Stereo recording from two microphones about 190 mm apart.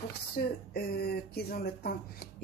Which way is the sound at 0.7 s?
55° left (ahead or behind).